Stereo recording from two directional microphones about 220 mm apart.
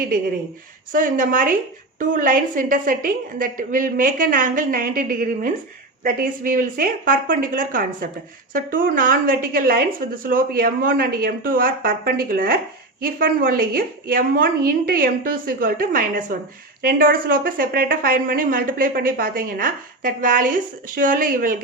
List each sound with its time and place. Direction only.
0.9 s a woman's voice: 35° right (ahead or behind)